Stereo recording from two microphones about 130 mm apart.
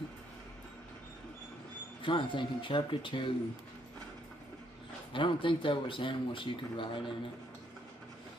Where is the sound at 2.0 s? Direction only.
40° left (ahead or behind).